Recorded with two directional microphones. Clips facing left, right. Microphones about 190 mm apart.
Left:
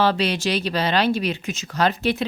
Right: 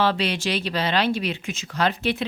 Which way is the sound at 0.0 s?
40° left (ahead or behind).